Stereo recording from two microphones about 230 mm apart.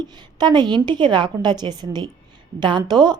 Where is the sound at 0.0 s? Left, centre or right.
Centre.